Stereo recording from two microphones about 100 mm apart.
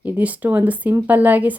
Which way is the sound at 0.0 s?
15° right (ahead or behind).